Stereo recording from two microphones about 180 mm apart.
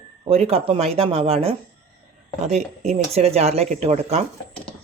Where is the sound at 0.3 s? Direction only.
35° right (ahead or behind).